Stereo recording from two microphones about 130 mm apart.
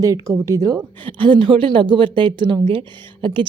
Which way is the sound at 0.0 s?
25° right (ahead or behind).